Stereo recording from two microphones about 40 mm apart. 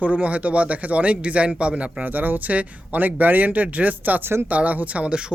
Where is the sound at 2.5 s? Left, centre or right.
Right.